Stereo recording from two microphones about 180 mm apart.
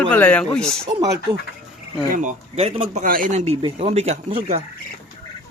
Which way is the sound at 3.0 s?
50° right (ahead or behind).